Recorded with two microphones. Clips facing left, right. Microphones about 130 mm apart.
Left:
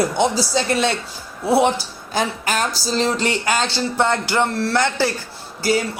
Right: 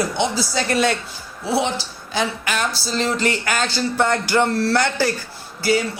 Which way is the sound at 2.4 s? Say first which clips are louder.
Left 2 dB; 40° left (ahead or behind).